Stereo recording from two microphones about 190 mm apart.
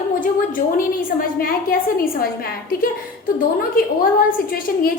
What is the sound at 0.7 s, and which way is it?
A woman's voice, 50° left (ahead or behind).